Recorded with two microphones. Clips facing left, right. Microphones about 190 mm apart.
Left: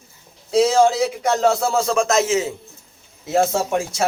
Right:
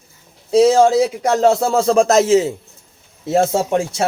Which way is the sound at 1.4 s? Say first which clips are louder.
Right 5 dB; 35° right (ahead or behind).